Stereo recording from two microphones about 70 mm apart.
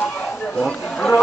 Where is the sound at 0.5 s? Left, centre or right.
Centre.